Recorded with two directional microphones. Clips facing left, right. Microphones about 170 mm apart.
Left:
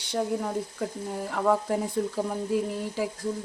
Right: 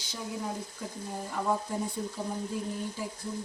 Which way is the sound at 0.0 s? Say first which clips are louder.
Left 8 dB; 60° left (ahead or behind).